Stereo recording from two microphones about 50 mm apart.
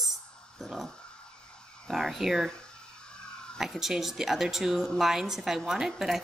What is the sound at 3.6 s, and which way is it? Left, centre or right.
A woman's voice, centre.